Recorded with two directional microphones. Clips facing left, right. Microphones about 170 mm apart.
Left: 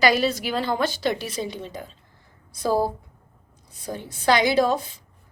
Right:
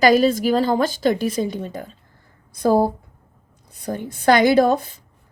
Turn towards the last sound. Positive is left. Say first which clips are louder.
# right 5 dB
turn(degrees=-50)  # may be behind; listen again after turning